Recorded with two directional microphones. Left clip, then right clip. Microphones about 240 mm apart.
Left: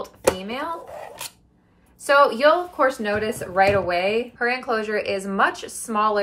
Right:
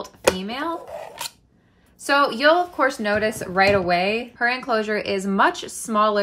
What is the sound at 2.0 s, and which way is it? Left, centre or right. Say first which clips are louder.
Speech: left 1 dB; right.